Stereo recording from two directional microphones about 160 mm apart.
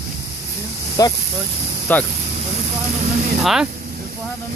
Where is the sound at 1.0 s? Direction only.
20° left (ahead or behind).